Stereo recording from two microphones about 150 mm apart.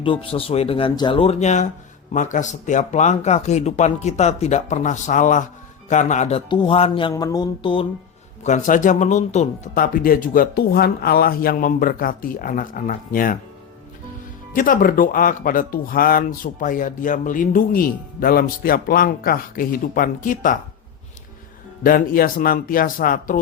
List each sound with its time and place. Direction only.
0.0 s speech: 35° left (ahead or behind)
6.5 s speech: 35° left (ahead or behind)
7.1 s a sound: 20° left (ahead or behind)
8.4 s speech: 55° left (ahead or behind)
9.7 s speech: 70° left (ahead or behind)
14.5 s speech: 65° left (ahead or behind)
21.8 s speech: 70° left (ahead or behind)